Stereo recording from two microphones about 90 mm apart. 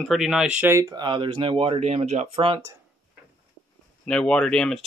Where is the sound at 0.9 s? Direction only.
60° right (ahead or behind); by 1.7 s 85° right.